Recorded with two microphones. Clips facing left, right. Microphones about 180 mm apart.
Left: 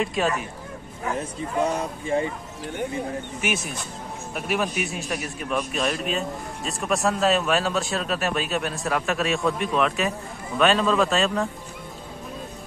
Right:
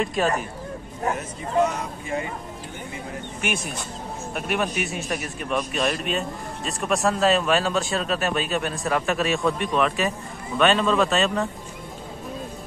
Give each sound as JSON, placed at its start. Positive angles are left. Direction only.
{"t": 0.0, "sound": "a man's voice", "side_deg": 0}
{"t": 1.1, "sound": "speech", "side_deg": 30}
{"t": 4.3, "sound": "a man's voice", "side_deg": 0}